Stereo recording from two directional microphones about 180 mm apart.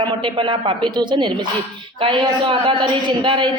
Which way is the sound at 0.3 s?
25° right (ahead or behind).